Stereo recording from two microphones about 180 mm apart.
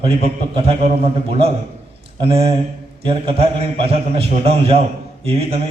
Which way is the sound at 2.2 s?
30° right (ahead or behind).